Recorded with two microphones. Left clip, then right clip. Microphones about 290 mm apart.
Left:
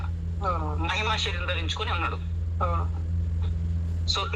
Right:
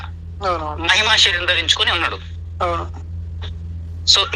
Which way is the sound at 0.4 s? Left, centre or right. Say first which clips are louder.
Right 11 dB; right.